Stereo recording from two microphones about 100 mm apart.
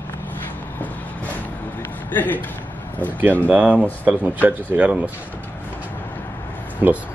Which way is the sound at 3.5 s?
15° right (ahead or behind).